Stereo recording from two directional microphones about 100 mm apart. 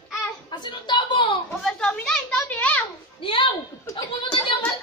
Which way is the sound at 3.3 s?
60° left (ahead or behind).